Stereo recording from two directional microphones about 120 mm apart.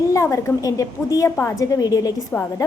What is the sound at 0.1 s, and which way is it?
A woman's voice, 25° left (ahead or behind).